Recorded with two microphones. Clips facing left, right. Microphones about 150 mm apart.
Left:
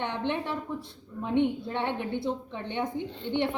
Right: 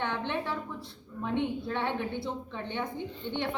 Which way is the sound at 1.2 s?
15° left (ahead or behind).